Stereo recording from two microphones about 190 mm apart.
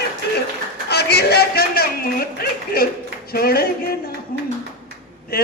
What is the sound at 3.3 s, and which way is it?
Speech, 55° left (ahead or behind).